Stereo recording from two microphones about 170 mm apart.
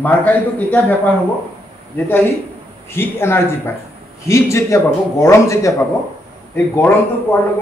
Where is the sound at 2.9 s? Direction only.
15° left (ahead or behind).